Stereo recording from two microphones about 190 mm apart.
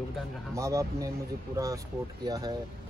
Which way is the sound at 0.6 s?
15° right (ahead or behind).